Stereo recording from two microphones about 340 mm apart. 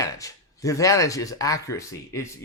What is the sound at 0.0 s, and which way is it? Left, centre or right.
Speech, centre.